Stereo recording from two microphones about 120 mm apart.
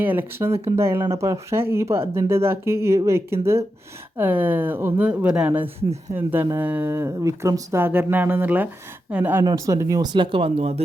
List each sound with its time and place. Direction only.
0.0 s speech: 15° right (ahead or behind)
9.4 s speech: 30° right (ahead or behind); by 10.8 s 55° right (ahead or behind)